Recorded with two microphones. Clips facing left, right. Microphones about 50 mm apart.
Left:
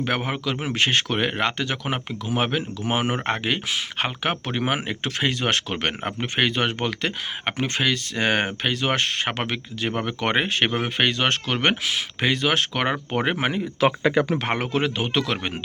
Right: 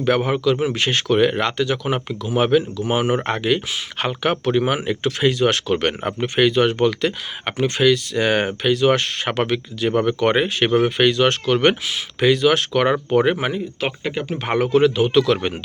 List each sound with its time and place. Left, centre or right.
0.0 s speech: left
5.7 s speech: centre
6.2 s speech: left
9.9 s speech: centre
10.2 s speech: left
12.9 s speech: centre
14.5 s speech: left